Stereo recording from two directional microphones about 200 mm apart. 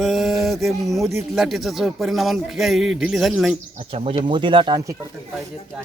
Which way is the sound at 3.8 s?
30° right (ahead or behind).